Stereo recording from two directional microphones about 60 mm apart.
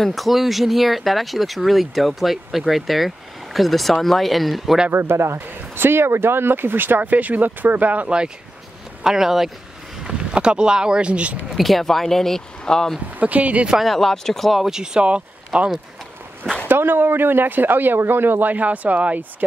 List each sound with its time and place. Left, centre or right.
0.0 s speech: centre
4.9 s speech: right
9.0 s speech: centre
11.5 s speech: centre
13.2 s speech: right
13.8 s speech: centre
16.6 s speech: right